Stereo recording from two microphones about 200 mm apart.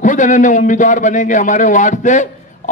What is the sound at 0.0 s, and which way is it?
Speech, 40° left (ahead or behind).